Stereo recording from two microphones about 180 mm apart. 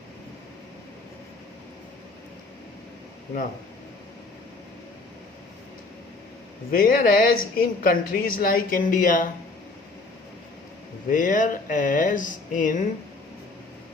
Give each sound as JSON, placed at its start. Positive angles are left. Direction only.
{"t": 6.7, "sound": "a woman's voice", "side_deg": 55}
{"t": 11.1, "sound": "a woman's voice", "side_deg": 45}